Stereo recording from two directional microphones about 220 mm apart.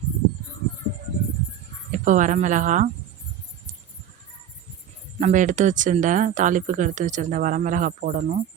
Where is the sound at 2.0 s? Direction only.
35° right (ahead or behind).